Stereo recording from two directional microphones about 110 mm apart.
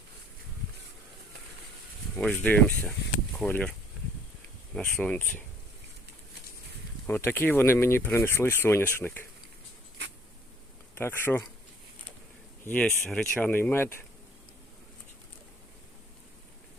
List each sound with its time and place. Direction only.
2.1 s speech: 15° left (ahead or behind)
7.1 s speech: 20° left (ahead or behind)
10.9 s speech: 20° left (ahead or behind)
12.6 s speech: 15° left (ahead or behind)